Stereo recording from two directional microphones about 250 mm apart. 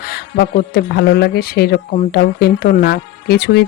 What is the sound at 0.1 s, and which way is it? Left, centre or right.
Speech, left.